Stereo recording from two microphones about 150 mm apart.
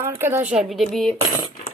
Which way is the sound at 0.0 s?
15° right (ahead or behind).